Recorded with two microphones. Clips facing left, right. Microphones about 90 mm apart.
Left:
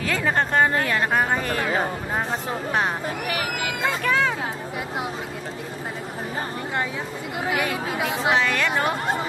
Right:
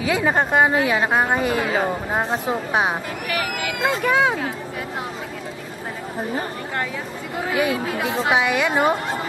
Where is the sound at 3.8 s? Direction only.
15° right (ahead or behind).